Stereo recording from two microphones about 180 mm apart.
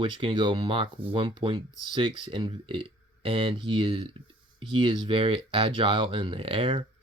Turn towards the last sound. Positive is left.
turn(degrees=-30)  # may be behind; listen again after turning